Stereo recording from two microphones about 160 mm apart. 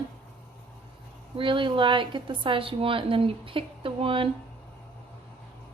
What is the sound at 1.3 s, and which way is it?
A woman's voice, 30° right (ahead or behind).